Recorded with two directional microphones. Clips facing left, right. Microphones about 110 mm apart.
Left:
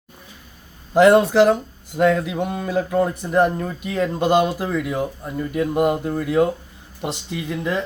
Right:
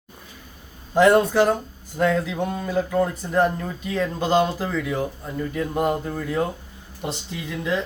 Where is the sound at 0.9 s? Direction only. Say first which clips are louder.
Left 3 dB; 70° left (ahead or behind).